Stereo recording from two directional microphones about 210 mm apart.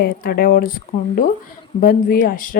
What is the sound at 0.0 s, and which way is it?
Speech, 45° left (ahead or behind).